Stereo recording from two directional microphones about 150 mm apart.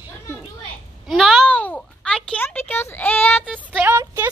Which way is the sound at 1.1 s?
Centre (ahead or behind).